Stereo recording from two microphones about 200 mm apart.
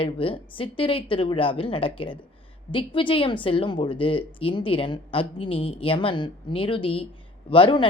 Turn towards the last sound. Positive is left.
turn(degrees=25)  # may be behind; listen again after turning